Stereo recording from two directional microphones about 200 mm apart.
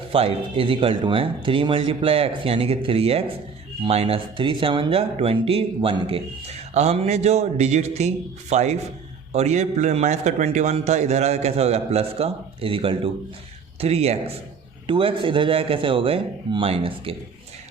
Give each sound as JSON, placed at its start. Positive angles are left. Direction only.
{"t": 0.1, "sound": "a man's voice", "side_deg": -30}